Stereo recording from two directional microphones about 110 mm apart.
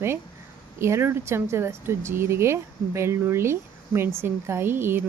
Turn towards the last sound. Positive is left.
turn(degrees=-20)  # may be behind; listen again after turning